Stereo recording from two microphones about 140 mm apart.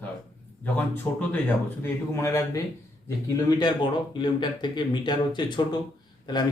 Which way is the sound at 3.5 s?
30° left (ahead or behind).